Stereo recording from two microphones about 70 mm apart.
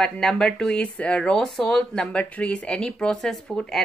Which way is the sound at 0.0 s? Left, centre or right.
Centre.